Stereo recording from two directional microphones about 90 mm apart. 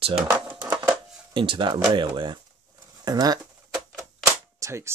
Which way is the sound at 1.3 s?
65° right (ahead or behind).